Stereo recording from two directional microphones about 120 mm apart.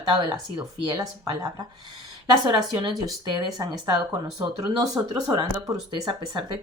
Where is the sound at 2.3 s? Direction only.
40° right (ahead or behind).